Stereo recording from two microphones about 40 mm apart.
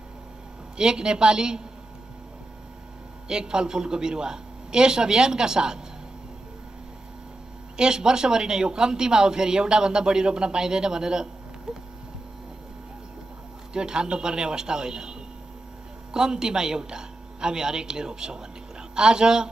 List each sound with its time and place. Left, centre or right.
0.7 s speech: centre
3.3 s speech: centre
7.7 s speech: centre
11.7 s a sound: centre
13.7 s a man's voice: right